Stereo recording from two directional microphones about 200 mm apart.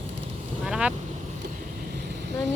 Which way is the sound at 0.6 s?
5° right (ahead or behind).